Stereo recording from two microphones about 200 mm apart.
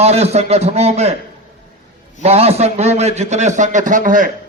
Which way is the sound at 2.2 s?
30° right (ahead or behind).